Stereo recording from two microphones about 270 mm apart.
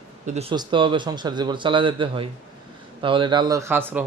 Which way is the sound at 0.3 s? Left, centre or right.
Centre.